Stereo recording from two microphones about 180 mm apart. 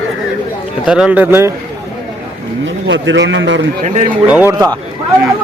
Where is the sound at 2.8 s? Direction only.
90° right.